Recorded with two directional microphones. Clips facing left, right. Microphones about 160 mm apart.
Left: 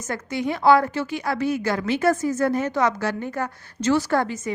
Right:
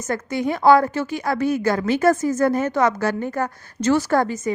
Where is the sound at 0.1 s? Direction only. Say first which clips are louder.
Right 3 dB; 45° right (ahead or behind).